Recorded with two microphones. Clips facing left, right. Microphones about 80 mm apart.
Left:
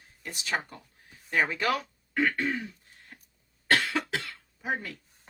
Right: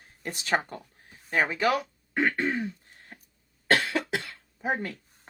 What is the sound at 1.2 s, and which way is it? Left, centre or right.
Speech, centre.